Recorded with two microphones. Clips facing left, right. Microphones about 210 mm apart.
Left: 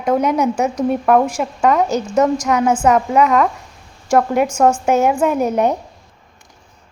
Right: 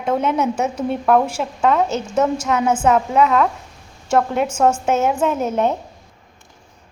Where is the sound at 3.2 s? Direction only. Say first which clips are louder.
Left 2 dB; 5° left (ahead or behind).